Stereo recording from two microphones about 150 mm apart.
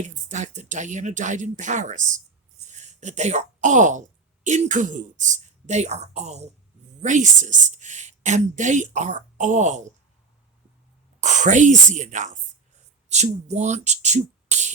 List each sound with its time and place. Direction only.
0.0 s a woman's voice: 50° right (ahead or behind)
11.2 s a woman's voice: 55° right (ahead or behind)